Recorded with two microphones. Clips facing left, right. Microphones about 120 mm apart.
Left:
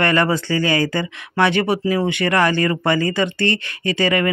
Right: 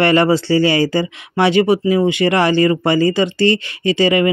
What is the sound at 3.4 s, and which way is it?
Speech, 55° left (ahead or behind).